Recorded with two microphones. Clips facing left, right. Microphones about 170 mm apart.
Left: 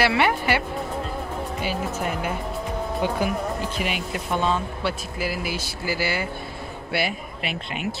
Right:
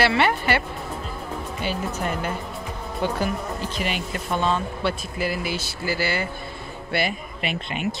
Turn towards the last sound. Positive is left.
turn(degrees=5)  # may be behind; listen again after turning